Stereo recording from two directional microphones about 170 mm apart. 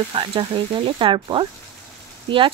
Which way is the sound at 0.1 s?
30° right (ahead or behind).